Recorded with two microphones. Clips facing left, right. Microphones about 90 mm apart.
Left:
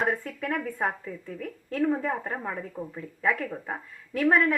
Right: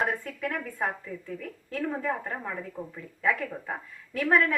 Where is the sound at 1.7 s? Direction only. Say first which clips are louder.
Left 4 dB; 15° left (ahead or behind).